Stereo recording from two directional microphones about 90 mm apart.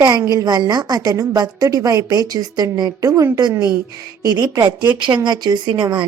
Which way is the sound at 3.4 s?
50° right (ahead or behind).